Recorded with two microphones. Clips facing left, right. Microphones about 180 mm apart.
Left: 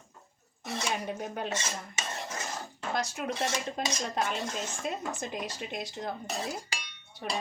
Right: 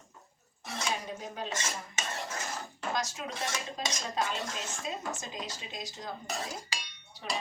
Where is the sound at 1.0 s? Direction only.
60° left (ahead or behind).